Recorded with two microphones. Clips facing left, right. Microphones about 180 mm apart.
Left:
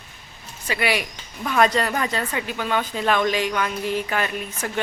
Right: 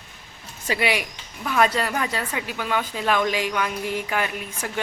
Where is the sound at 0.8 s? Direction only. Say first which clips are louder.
Left 1 dB; 15° right (ahead or behind).